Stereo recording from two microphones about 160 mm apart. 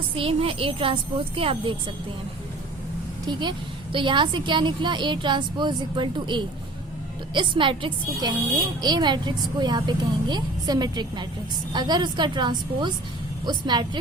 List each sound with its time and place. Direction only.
0.2 s speech: 35° right (ahead or behind)
3.9 s speech: 30° right (ahead or behind)